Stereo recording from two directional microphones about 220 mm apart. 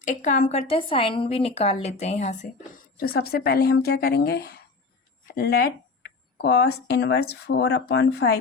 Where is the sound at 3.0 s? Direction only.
45° left (ahead or behind).